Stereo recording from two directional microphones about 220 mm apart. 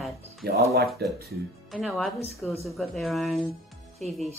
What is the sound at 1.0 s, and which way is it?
Speech, 50° right (ahead or behind).